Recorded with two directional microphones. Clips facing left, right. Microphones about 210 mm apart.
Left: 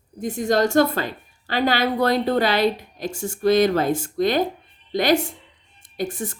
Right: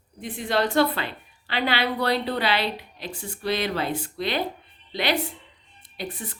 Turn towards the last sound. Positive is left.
turn(degrees=45)  # may be behind; listen again after turning